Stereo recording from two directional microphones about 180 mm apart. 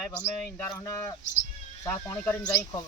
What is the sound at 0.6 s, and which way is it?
Speech, 15° left (ahead or behind).